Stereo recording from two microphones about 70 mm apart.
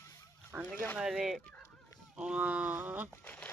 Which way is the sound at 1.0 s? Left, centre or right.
Centre.